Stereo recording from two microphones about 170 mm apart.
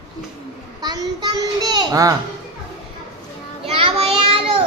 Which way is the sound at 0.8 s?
25° right (ahead or behind).